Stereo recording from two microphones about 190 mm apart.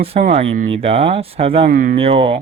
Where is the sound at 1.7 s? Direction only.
45° right (ahead or behind).